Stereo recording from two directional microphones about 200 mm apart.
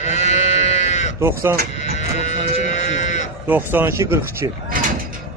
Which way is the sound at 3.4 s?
10° right (ahead or behind).